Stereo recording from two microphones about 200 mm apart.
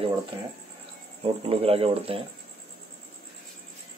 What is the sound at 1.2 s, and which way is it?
Speech, 30° right (ahead or behind).